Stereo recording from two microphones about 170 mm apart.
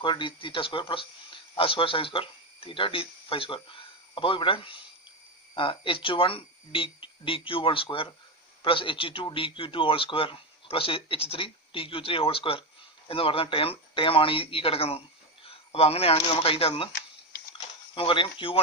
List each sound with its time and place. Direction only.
0.0 s speech: 30° left (ahead or behind)
17.9 s speech: 30° left (ahead or behind)